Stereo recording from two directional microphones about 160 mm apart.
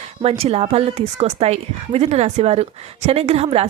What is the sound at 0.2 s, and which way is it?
A woman's voice, 40° right (ahead or behind).